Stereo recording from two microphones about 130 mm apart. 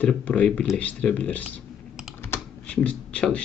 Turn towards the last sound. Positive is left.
turn(degrees=10)  # may be behind; listen again after turning